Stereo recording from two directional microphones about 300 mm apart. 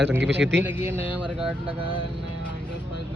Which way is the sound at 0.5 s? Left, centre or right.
Centre.